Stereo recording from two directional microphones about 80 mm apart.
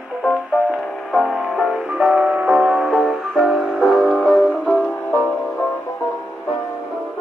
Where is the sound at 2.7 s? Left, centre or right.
Centre.